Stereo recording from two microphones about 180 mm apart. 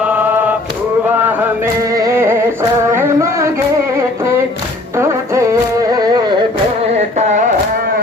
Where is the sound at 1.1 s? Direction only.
10° right (ahead or behind).